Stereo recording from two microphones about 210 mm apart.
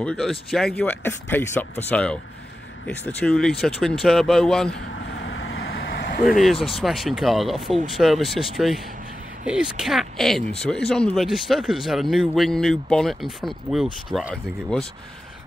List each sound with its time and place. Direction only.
0.0 s a man's voice: centre (ahead or behind)
3.2 s a man's voice: 5° left (ahead or behind)
5.1 s vehicle: 60° left (ahead or behind)
5.6 s vehicle: 45° left (ahead or behind)
6.2 s a man's voice: centre (ahead or behind)